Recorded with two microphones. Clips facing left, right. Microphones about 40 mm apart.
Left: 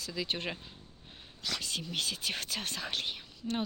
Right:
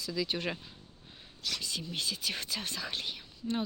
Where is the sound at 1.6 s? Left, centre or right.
Left.